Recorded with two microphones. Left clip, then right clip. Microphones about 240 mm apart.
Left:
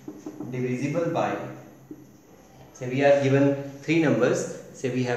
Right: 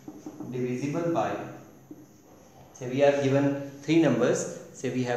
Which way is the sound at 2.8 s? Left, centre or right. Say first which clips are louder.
Left 3 dB; centre.